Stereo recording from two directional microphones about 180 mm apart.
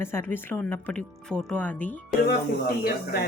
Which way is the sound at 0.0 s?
15° left (ahead or behind).